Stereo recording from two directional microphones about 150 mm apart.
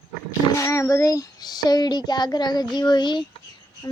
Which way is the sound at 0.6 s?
20° left (ahead or behind).